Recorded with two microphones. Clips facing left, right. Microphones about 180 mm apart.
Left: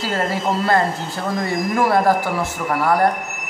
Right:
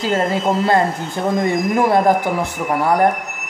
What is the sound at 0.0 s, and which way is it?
Speech, 20° right (ahead or behind).